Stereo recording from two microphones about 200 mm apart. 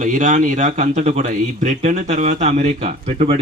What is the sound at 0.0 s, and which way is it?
Speech, 40° right (ahead or behind).